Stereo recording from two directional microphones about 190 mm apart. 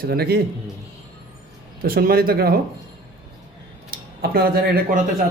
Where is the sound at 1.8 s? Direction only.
50° right (ahead or behind).